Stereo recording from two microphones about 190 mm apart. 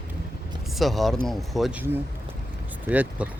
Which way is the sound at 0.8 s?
Centre (ahead or behind).